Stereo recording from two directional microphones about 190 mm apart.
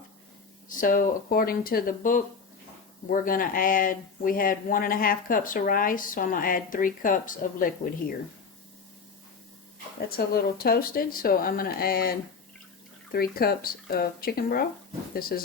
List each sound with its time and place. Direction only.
0.8 s speech: 45° left (ahead or behind)
10.2 s speech: 55° left (ahead or behind)